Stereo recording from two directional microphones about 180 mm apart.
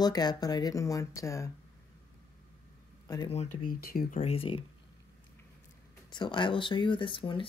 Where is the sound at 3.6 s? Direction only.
50° left (ahead or behind).